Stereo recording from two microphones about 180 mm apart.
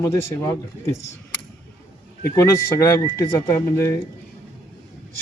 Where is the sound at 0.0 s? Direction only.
15° left (ahead or behind).